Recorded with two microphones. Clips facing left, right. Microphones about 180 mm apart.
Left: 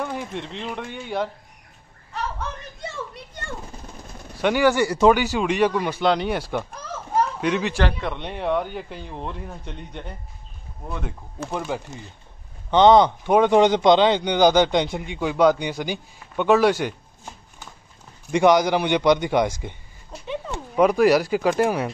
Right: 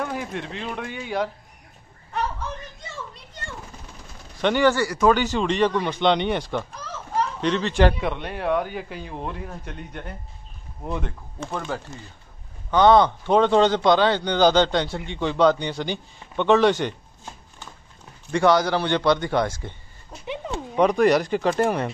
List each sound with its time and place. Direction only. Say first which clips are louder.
0.0 s speech: even; 5° right (ahead or behind)
4.4 s speech: left 1 dB; 10° left (ahead or behind)
4.8 s speech: left 3 dB; 25° left (ahead or behind)
5.1 s speech: even; 10° left (ahead or behind)
8.0 s speech: right 1 dB; 5° right (ahead or behind)
11.0 s speech: even; 5° left (ahead or behind)
20.7 s speech: left 1 dB; 5° left (ahead or behind)